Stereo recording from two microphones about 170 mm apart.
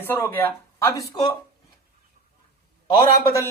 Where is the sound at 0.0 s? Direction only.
10° left (ahead or behind).